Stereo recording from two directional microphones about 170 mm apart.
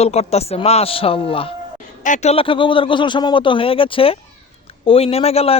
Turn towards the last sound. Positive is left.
turn(degrees=35)  # may be behind; listen again after turning